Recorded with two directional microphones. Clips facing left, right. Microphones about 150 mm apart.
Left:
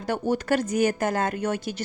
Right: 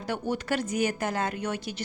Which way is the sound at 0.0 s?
45° left (ahead or behind).